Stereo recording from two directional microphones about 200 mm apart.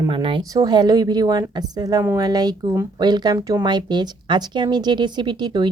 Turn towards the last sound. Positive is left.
turn(degrees=-20)  # may be behind; listen again after turning